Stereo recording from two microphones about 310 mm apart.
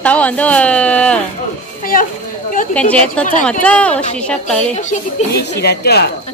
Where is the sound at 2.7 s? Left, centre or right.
Centre.